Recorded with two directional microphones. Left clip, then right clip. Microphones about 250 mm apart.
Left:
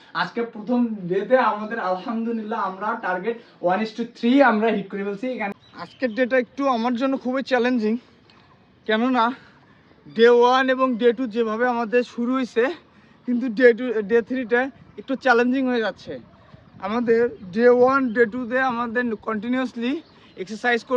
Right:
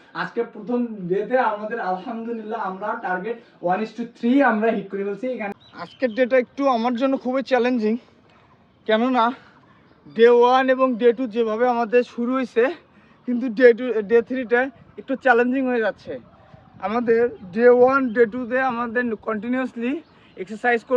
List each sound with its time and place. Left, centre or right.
1.1 s speech: centre